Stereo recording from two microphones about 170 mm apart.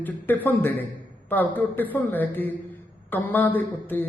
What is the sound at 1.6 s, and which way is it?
A man's voice, 10° left (ahead or behind).